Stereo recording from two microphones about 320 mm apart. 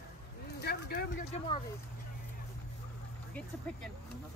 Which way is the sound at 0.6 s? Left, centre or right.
Left.